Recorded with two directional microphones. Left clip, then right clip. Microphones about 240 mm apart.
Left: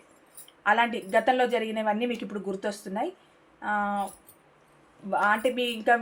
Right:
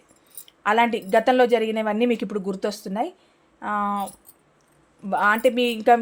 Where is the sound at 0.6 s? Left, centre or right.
Right.